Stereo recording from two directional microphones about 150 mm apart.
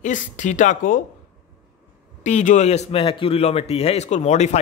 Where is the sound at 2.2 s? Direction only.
55° left (ahead or behind).